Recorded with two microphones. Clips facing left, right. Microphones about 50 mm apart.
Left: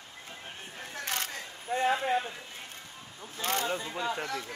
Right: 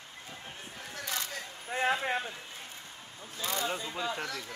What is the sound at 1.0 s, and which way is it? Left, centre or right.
Single-lens reflex camera, left.